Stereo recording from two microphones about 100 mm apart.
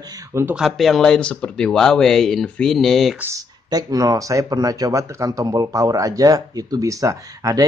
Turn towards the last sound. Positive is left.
turn(degrees=-35)  # may be behind; listen again after turning